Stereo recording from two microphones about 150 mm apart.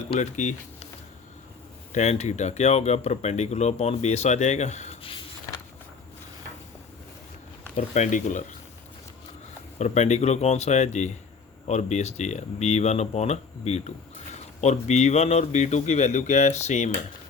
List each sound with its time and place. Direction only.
0.2 s speech: 55° left (ahead or behind)
1.9 s speech: 50° left (ahead or behind)
7.8 s speech: 55° left (ahead or behind)
9.7 s speech: 50° left (ahead or behind)